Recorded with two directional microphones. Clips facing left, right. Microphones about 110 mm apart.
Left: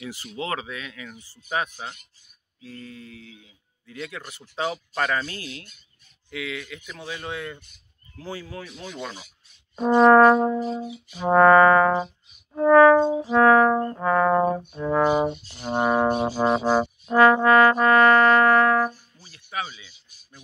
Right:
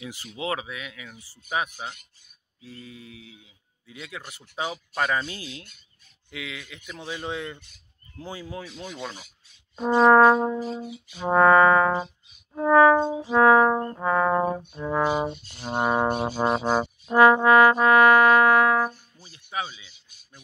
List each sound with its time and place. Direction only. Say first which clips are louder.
0.0 s trombone: left 1 dB; 15° right (ahead or behind)
6.3 s speech: left 5 dB; 20° right (ahead or behind)
8.2 s trombone: left 1 dB; 15° right (ahead or behind)
8.8 s trombone: left 3 dB; 5° right (ahead or behind)
9.8 s music: left 2 dB; centre (ahead or behind)
12.5 s brass instrument: left 3 dB; 10° right (ahead or behind)
13.7 s music: left 2 dB; 5° right (ahead or behind)
15.2 s music: left 4 dB; 15° left (ahead or behind)
15.6 s music: left 2 dB; 5° right (ahead or behind)
16.3 s trombone: left 1 dB; 10° right (ahead or behind)
16.6 s music: left 3 dB; centre (ahead or behind)
17.1 s trombone: even; 15° right (ahead or behind)